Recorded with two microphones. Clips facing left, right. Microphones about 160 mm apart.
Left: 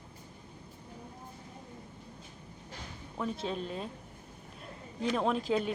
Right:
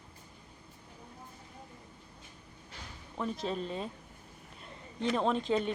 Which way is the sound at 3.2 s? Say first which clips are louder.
Even; centre (ahead or behind).